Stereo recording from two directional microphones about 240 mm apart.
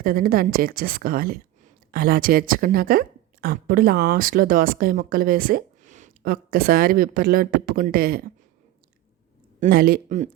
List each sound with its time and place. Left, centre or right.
0.0 s a woman's voice: right
9.6 s a woman's voice: right